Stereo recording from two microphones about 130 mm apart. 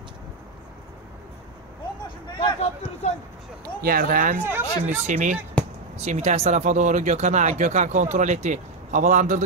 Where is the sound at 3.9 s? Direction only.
90° right.